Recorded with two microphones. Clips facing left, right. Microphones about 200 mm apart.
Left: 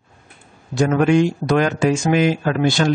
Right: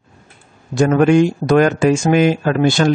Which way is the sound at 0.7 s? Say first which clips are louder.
Right 3 dB; 50° right (ahead or behind).